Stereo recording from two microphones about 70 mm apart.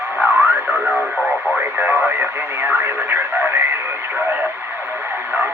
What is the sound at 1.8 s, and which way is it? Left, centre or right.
Radio, right.